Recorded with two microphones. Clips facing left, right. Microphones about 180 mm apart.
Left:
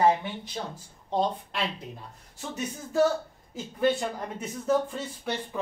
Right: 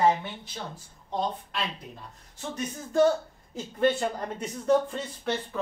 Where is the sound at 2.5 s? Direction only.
5° left (ahead or behind).